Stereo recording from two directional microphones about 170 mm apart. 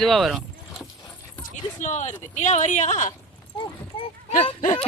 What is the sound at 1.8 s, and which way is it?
Speech, 45° left (ahead or behind).